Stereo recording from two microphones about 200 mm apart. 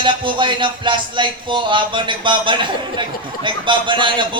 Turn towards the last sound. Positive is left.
turn(degrees=-25)  # may be behind; listen again after turning